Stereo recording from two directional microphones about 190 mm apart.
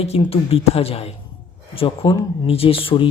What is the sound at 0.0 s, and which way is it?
Speech, 30° left (ahead or behind).